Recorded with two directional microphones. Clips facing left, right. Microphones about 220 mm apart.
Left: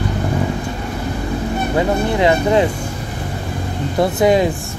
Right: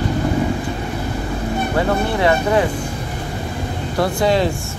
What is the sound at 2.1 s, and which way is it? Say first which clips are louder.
Speech: left 3 dB; 20° left (ahead or behind).